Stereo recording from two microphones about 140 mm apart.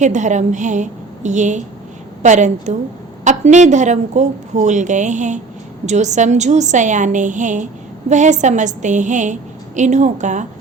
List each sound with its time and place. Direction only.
0.0 s a woman's voice: 60° right (ahead or behind)